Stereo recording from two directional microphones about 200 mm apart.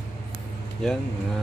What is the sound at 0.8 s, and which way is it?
Speech, 5° left (ahead or behind).